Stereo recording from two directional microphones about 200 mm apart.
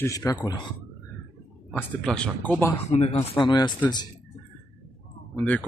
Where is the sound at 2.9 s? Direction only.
30° left (ahead or behind).